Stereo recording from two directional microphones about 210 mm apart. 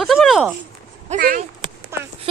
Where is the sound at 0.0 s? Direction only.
Centre (ahead or behind).